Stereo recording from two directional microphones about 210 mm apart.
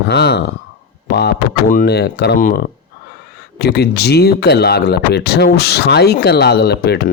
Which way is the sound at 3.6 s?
50° left (ahead or behind).